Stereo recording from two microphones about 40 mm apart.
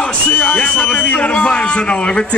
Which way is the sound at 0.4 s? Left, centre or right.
Left.